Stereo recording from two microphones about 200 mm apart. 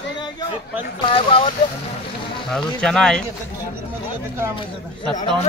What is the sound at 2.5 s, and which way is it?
Speech, centre (ahead or behind).